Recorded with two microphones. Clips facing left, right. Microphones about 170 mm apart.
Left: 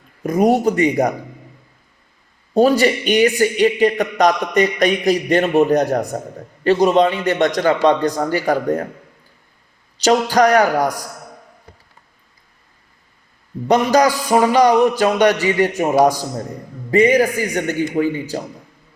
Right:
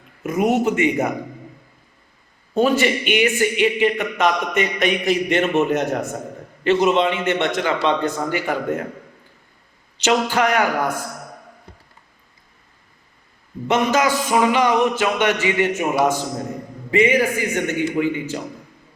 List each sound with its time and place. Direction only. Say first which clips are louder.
0.2 s speech: left 4 dB; 35° left (ahead or behind)
2.6 s speech: left 4 dB; 35° left (ahead or behind)
10.0 s speech: left 5 dB; 40° left (ahead or behind)
13.7 s speech: left 4 dB; 40° left (ahead or behind)